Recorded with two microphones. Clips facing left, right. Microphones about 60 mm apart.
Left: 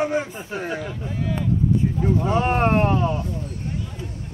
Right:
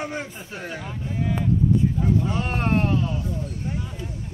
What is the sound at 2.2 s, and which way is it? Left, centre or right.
Speech, left.